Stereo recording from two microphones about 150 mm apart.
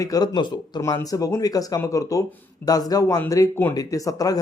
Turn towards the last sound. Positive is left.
turn(degrees=25)  # may be behind; listen again after turning